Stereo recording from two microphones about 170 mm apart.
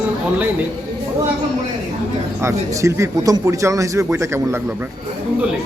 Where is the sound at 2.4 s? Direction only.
15° right (ahead or behind).